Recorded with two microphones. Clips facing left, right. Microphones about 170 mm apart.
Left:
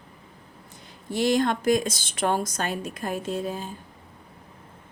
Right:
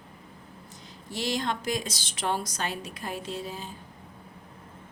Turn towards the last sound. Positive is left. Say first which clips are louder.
# left 6 dB
turn(degrees=50)  # may be behind; listen again after turning